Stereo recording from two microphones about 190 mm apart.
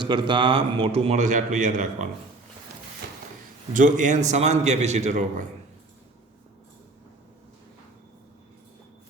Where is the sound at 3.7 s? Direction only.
40° right (ahead or behind).